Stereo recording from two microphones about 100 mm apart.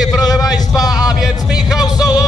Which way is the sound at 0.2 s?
40° left (ahead or behind).